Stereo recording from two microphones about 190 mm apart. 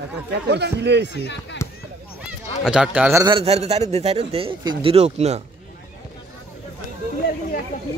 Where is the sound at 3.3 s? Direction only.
35° right (ahead or behind).